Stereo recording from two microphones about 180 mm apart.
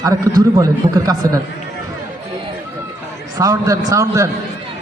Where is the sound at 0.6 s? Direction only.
20° right (ahead or behind).